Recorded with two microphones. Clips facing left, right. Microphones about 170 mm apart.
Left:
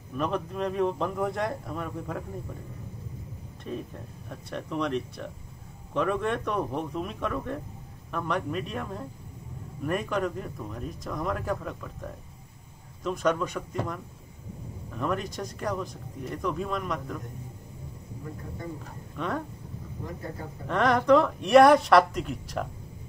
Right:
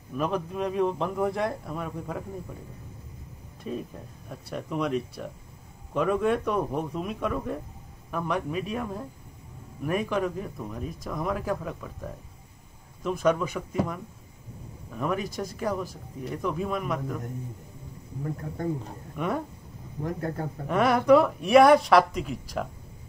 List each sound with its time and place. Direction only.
0.1 s speech: centre (ahead or behind)
3.6 s speech: 5° right (ahead or behind)
19.1 s speech: 10° right (ahead or behind)
20.0 s speech: 60° right (ahead or behind)
20.6 s speech: 10° right (ahead or behind)